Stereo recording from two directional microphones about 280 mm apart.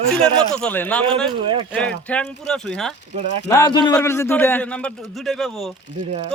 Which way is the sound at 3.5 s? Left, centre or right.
Centre.